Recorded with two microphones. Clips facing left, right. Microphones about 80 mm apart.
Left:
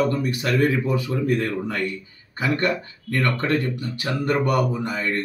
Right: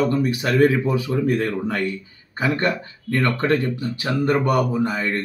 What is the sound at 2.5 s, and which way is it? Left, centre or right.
Speech, right.